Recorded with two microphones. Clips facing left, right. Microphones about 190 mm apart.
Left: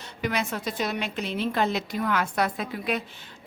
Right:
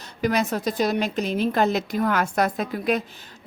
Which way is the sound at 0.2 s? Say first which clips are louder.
Right 6 dB; 40° right (ahead or behind).